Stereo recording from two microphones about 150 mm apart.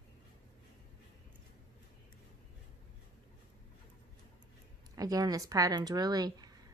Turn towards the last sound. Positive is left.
turn(degrees=-25)  # may be behind; listen again after turning